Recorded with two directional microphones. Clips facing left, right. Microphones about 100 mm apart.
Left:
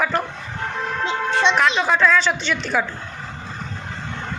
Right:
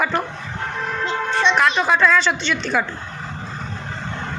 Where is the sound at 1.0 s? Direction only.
20° left (ahead or behind).